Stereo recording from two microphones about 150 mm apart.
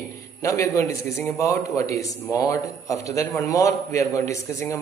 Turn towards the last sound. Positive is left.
turn(degrees=20)  # may be behind; listen again after turning